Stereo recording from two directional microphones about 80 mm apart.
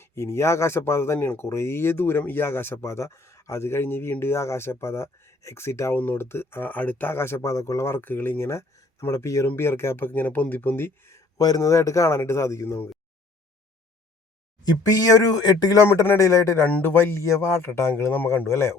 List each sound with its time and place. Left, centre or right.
0.0 s speech: left
11.3 s speech: left
14.7 s speech: left
16.1 s speech: left
16.8 s speech: left
18.4 s speech: left